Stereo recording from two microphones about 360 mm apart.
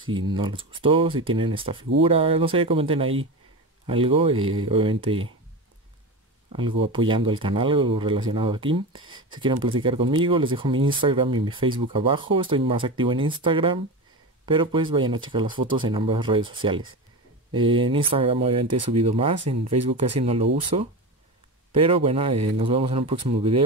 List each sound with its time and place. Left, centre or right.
0.3 s speech: centre
6.5 s speech: centre
21.8 s speech: centre